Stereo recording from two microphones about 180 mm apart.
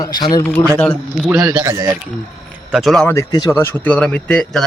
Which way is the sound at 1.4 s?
15° right (ahead or behind).